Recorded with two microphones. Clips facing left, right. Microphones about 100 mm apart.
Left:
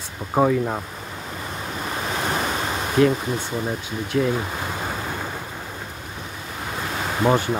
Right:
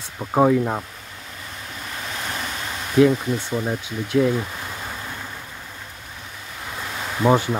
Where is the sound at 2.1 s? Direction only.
40° left (ahead or behind).